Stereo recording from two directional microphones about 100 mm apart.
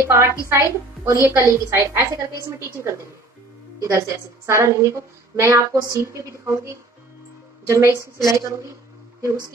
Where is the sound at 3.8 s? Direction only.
35° right (ahead or behind).